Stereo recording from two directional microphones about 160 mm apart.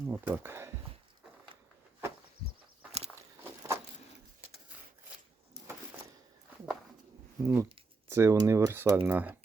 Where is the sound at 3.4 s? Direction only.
15° right (ahead or behind).